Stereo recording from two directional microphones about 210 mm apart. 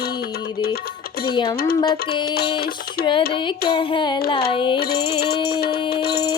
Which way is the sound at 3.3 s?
20° left (ahead or behind).